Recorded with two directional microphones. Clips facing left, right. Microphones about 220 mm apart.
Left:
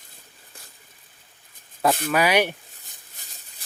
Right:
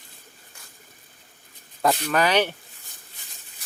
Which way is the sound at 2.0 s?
10° left (ahead or behind).